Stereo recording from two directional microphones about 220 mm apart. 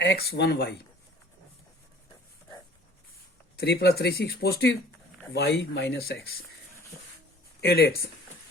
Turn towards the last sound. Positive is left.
turn(degrees=45)  # may be behind; listen again after turning